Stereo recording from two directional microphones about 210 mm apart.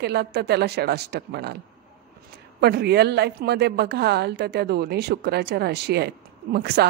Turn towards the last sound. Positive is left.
turn(degrees=-50)  # may be behind; listen again after turning